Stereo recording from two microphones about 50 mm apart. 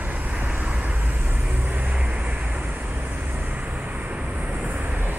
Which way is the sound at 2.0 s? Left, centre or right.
Right.